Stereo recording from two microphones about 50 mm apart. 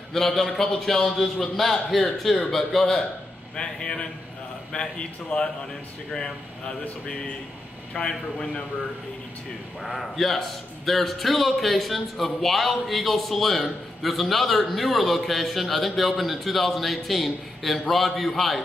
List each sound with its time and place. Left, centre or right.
0.1 s a man's voice: centre
3.5 s a man's voice: centre
7.9 s a man's voice: centre
9.8 s speech: centre